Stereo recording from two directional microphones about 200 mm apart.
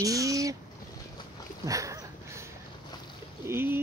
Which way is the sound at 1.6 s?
15° right (ahead or behind).